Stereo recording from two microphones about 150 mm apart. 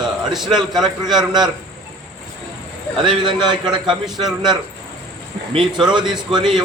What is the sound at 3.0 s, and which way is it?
Speech, 30° right (ahead or behind).